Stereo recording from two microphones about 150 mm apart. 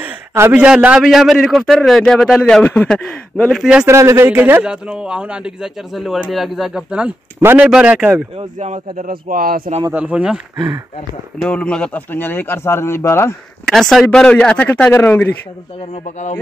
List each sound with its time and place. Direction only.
0.0 s a man's voice: 10° right (ahead or behind)
3.8 s a man's voice: 20° right (ahead or behind)
8.4 s speech: 50° right (ahead or behind); by 9.6 s 75° right (ahead or behind)
9.9 s a man's voice: 10° right (ahead or behind)
11.4 s speech: 5° left (ahead or behind)
13.7 s speech: centre (ahead or behind)
15.9 s speech: 50° left (ahead or behind)